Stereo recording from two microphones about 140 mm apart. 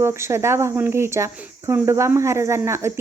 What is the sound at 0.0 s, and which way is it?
Speech, 20° right (ahead or behind).